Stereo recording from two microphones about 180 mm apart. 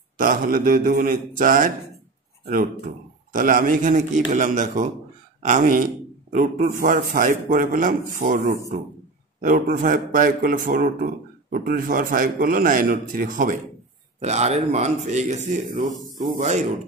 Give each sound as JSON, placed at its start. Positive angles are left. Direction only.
{"t": 0.2, "sound": "a man's voice", "side_deg": -50}
{"t": 3.3, "sound": "a man's voice", "side_deg": -45}
{"t": 14.2, "sound": "speech", "side_deg": -40}